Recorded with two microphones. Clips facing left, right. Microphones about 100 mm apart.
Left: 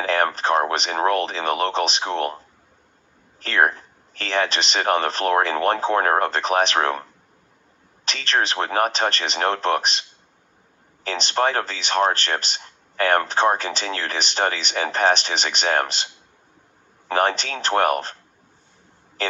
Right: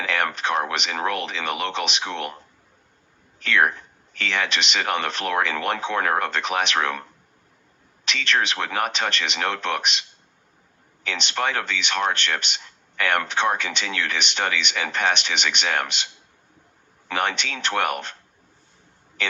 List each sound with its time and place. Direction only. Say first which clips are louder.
0.0 s speech: left 4 dB; 35° left (ahead or behind)
3.4 s speech: left 1 dB; 35° left (ahead or behind)
8.0 s speech: left 1 dB; 35° left (ahead or behind)
17.1 s speech: left 5 dB; 35° left (ahead or behind)